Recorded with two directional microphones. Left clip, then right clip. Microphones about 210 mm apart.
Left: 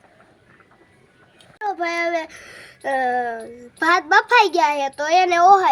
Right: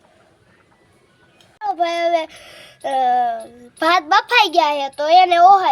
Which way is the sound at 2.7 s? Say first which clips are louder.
Right 4 dB; 35° right (ahead or behind).